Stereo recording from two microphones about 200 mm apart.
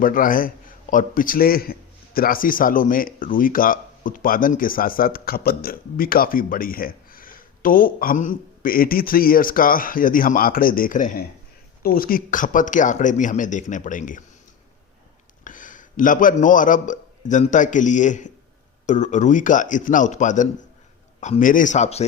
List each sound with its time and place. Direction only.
0.0 s a man's voice: 45° left (ahead or behind)
15.4 s a man's voice: 40° left (ahead or behind)